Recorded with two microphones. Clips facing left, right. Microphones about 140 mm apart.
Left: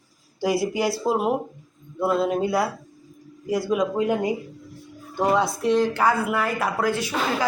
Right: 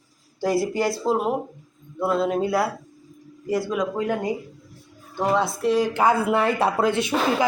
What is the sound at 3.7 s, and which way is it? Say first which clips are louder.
Speech: left 2 dB; 15° left (ahead or behind).